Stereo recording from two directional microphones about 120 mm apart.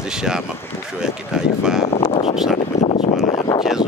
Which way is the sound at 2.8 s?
65° left (ahead or behind).